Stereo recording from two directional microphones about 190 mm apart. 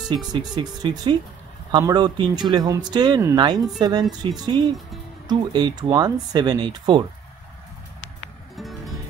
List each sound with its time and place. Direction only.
0.3 s speech: 25° right (ahead or behind)
8.0 s music: 5° left (ahead or behind)